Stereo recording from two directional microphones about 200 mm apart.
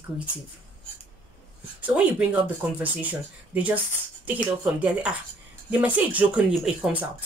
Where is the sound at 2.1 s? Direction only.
5° right (ahead or behind).